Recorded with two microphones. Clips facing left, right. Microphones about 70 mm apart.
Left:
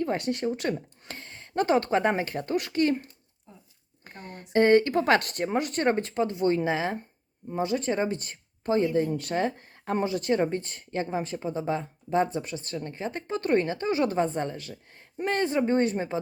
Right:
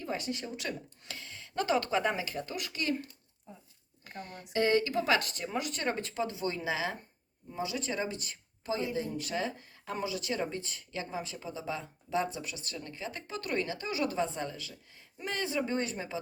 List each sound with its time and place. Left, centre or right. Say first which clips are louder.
0.0 s speech: left 9 dB; left
4.0 s speech: left 1 dB; left